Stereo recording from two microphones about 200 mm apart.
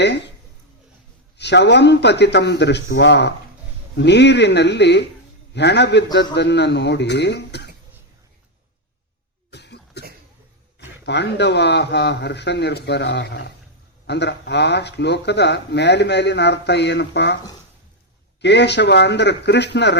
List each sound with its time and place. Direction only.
1.4 s speech: 60° left (ahead or behind)
9.5 s cough: 55° left (ahead or behind)
10.8 s speech: 60° left (ahead or behind)
18.4 s speech: 60° left (ahead or behind)